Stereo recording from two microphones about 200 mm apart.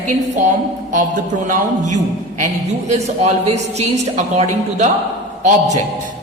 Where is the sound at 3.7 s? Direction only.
35° right (ahead or behind).